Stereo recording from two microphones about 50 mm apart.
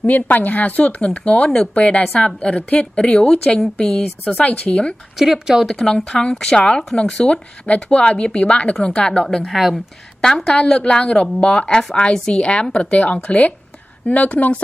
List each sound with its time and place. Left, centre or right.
0.0 s a woman's voice: left
5.2 s speech: centre
5.7 s a woman's voice: centre
6.0 s a woman's voice: left
9.4 s speech: centre
10.5 s a woman's voice: centre